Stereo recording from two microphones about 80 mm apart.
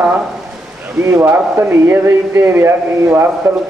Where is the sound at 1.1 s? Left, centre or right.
Right.